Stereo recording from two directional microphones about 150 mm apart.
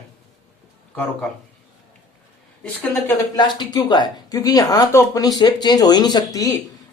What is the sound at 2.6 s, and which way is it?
Speech, 10° left (ahead or behind).